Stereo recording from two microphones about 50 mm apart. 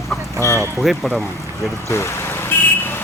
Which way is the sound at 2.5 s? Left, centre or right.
Left.